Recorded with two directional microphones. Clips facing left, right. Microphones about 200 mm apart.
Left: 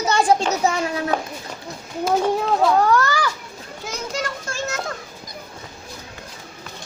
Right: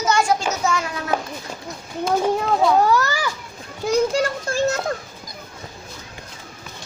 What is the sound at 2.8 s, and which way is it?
Children playing, 10° right (ahead or behind).